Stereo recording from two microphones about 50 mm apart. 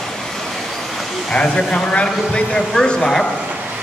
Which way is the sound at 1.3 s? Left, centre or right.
Centre.